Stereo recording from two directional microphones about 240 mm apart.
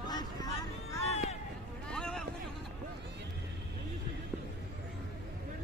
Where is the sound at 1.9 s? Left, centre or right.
Centre.